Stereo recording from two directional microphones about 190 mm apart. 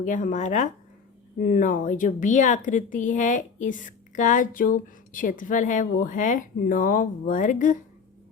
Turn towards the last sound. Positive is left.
turn(degrees=45)  # may be behind; listen again after turning